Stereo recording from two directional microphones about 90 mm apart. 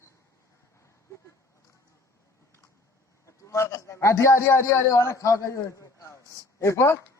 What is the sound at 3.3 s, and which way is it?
A man's voice, 30° left (ahead or behind).